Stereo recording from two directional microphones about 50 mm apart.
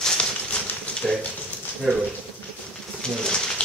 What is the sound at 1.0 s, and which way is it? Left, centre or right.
Speech, centre.